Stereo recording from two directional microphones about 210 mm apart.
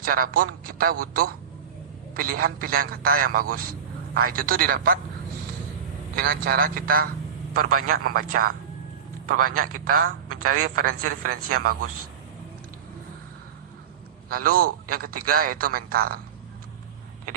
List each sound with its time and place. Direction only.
0.0 s a man's voice: 45° right (ahead or behind)
6.1 s a man's voice: 45° right (ahead or behind)
10.2 s a man's voice: 90° right
11.3 s a man's voice: 45° right (ahead or behind)
14.3 s a man's voice: 45° right (ahead or behind)